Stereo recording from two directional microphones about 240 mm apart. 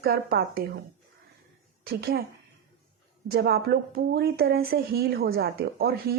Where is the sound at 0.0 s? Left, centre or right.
Right.